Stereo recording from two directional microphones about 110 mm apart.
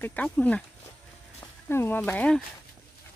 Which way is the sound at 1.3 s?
20° left (ahead or behind).